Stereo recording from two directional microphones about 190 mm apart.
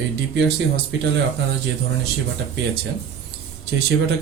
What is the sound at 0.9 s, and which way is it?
Speech, 70° right (ahead or behind).